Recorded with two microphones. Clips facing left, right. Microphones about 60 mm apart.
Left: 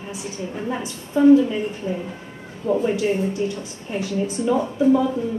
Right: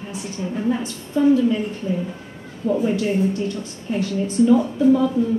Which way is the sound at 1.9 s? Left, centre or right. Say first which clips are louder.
Right 5 dB; left.